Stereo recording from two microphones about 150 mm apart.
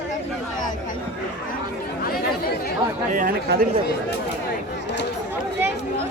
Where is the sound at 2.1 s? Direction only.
90° left.